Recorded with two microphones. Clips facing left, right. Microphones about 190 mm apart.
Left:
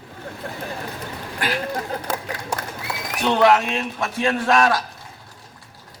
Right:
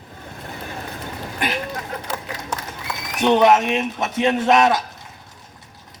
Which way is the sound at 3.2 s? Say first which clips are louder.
Right 2 dB; 20° right (ahead or behind).